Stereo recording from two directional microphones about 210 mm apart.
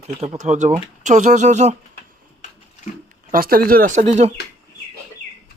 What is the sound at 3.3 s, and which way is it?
Speech, 45° right (ahead or behind).